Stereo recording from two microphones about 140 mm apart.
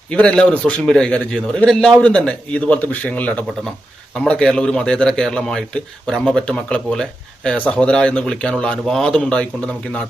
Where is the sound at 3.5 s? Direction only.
Centre (ahead or behind).